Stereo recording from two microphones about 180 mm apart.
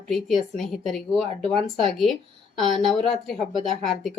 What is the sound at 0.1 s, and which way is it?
Speech, centre (ahead or behind).